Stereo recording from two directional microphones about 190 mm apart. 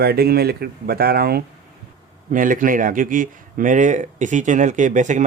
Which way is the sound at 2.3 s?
45° right (ahead or behind).